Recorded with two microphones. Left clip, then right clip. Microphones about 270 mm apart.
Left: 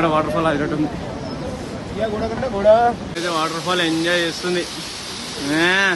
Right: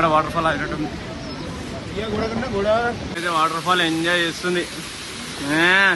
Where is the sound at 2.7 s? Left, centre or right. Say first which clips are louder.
Left 7 dB; left.